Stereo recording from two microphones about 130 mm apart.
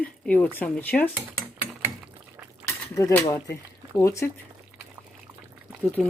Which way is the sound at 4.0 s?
20° left (ahead or behind).